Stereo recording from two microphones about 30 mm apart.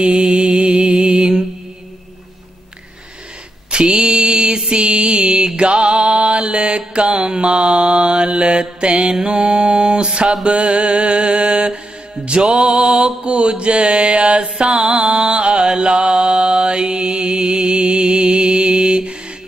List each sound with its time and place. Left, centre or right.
0.0 s mantra: right
3.7 s mantra: right
4.6 s music: right
5.6 s mantra: right